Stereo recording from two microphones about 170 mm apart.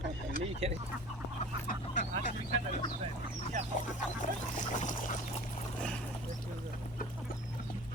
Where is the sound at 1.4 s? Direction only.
50° left (ahead or behind).